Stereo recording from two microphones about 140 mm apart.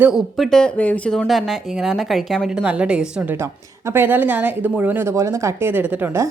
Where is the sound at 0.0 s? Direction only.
Centre (ahead or behind).